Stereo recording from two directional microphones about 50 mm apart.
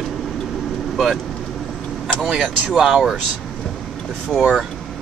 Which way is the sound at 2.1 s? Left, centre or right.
Centre.